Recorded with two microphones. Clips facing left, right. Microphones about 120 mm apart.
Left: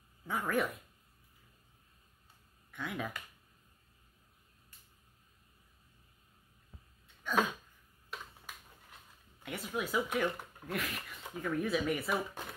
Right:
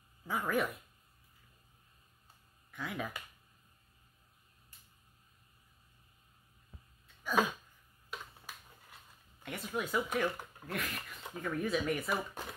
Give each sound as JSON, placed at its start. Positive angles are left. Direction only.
{"t": 0.2, "sound": "speech", "side_deg": 0}
{"t": 2.7, "sound": "speech", "side_deg": 0}
{"t": 8.9, "sound": "speech", "side_deg": 0}